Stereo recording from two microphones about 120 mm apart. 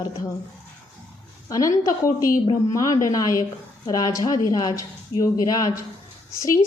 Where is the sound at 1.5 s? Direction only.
25° left (ahead or behind).